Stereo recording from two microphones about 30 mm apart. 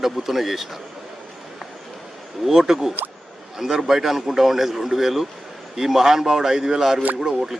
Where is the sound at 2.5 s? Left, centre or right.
Centre.